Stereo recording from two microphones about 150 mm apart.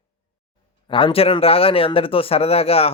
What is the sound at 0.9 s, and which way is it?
Speech, 35° left (ahead or behind).